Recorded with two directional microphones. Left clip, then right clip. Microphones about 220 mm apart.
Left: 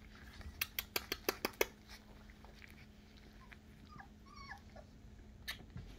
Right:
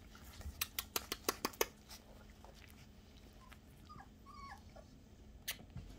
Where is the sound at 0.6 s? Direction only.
10° left (ahead or behind).